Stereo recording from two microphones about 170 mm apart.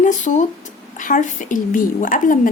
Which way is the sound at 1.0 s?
50° left (ahead or behind).